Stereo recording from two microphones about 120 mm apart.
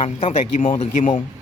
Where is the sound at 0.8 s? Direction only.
90° left.